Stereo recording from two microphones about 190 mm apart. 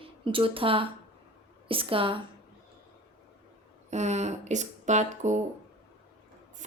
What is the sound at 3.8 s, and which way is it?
Speech, 35° right (ahead or behind).